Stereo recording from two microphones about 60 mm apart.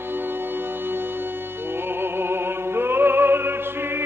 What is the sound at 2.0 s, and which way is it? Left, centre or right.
Music, right.